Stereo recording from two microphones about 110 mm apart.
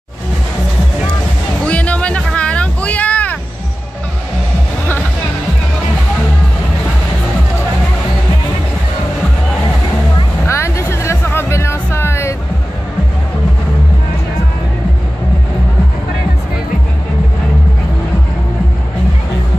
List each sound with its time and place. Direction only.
1.7 s music: 10° left (ahead or behind)
10.4 s music: 25° left (ahead or behind)